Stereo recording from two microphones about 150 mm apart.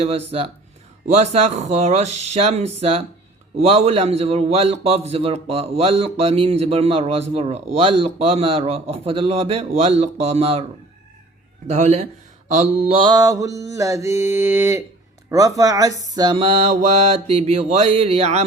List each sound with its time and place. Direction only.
0.0 s a man's voice: 40° right (ahead or behind)
1.1 s mantra: 45° right (ahead or behind)
3.6 s a man's voice: 45° right (ahead or behind)
11.7 s mantra: 50° right (ahead or behind)